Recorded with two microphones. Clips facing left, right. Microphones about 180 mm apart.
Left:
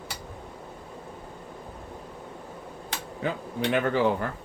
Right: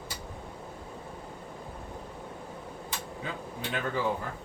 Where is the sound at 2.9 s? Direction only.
75° left (ahead or behind).